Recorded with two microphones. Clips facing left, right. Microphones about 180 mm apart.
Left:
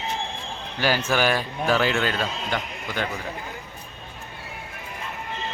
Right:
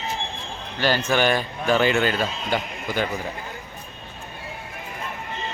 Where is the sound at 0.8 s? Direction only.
10° left (ahead or behind).